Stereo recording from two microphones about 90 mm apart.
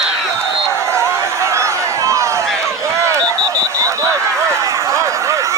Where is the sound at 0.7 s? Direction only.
30° right (ahead or behind).